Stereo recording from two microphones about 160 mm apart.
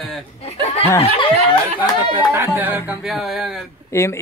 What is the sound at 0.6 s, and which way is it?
Speech, 45° left (ahead or behind).